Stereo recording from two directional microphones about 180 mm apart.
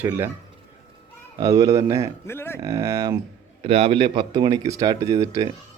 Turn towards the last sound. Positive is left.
turn(degrees=-20)  # may be behind; listen again after turning